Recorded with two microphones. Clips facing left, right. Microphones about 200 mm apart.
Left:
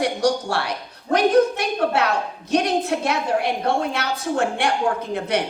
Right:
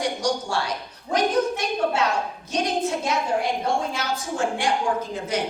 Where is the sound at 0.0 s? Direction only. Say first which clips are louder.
Left 4 dB; 60° left (ahead or behind).